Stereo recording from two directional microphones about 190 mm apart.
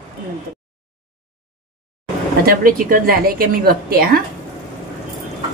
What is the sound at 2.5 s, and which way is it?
A woman's voice, 45° right (ahead or behind).